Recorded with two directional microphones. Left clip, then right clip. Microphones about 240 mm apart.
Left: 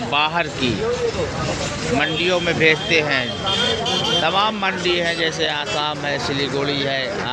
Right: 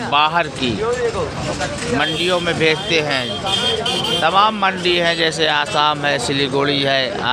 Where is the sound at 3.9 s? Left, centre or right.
Right.